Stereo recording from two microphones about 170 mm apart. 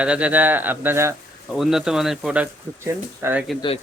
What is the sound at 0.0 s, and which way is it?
Speech, 5° right (ahead or behind).